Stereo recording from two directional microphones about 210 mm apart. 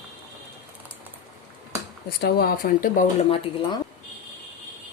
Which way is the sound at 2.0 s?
45° left (ahead or behind).